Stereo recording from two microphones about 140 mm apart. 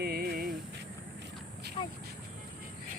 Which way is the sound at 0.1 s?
90° right.